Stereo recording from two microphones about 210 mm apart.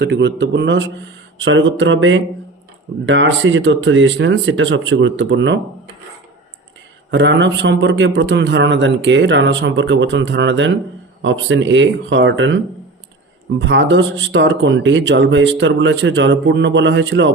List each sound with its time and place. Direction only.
0.0 s speech: 55° right (ahead or behind)
7.1 s speech: 60° right (ahead or behind)
13.7 s speech: 60° right (ahead or behind)